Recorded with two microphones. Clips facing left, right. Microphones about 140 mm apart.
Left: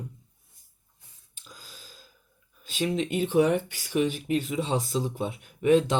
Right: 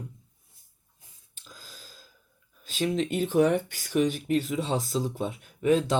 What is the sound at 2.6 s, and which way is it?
Speech, 40° right (ahead or behind).